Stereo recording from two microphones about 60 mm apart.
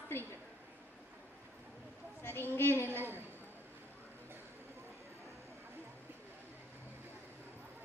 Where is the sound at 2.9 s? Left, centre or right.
Right.